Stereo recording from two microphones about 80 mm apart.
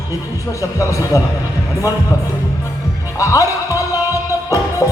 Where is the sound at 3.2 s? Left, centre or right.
Left.